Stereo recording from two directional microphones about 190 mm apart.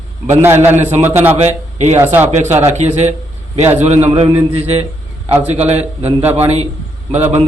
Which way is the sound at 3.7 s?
35° right (ahead or behind).